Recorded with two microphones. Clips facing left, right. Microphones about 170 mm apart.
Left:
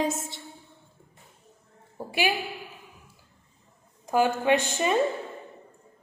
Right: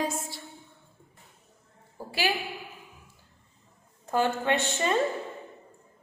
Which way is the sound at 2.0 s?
15° left (ahead or behind).